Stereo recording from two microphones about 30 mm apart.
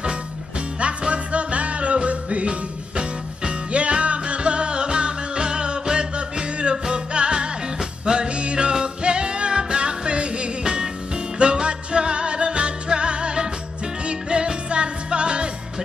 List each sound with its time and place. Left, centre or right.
0.7 s music: right
3.0 s music: right